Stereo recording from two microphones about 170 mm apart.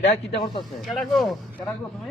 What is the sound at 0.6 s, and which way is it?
Speech, centre (ahead or behind).